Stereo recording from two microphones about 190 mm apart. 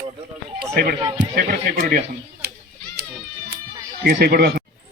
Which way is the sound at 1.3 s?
50° right (ahead or behind).